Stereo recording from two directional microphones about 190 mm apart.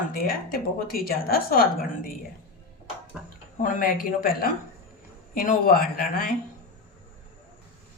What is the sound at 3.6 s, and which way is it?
Speech, 45° left (ahead or behind).